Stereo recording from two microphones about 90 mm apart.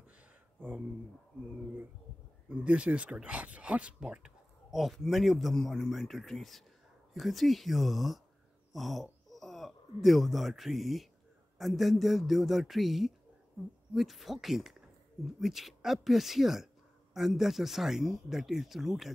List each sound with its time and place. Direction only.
0.6 s speech: 15° right (ahead or behind)
2.5 s speech: 15° right (ahead or behind)